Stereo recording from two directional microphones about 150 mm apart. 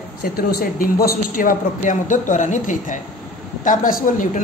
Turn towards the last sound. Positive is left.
turn(degrees=60)  # may be behind; listen again after turning